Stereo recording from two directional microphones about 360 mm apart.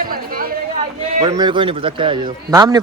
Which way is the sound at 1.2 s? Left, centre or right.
Centre.